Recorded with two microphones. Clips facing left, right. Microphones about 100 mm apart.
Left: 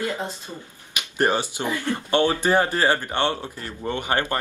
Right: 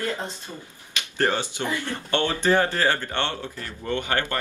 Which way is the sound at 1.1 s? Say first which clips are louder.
Left 2 dB; 15° left (ahead or behind).